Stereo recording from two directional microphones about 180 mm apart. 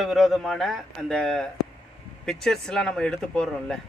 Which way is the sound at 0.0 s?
Centre (ahead or behind).